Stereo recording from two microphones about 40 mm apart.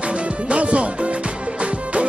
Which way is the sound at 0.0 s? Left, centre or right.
Right.